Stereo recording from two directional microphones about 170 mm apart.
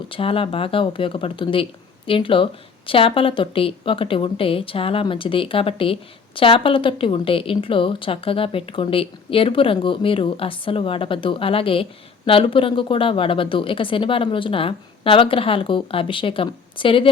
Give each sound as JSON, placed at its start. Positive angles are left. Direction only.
{"t": 0.1, "sound": "a woman's voice", "side_deg": 35}